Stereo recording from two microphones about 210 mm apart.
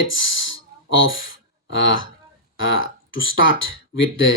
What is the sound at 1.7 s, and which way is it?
Speech, 65° left (ahead or behind).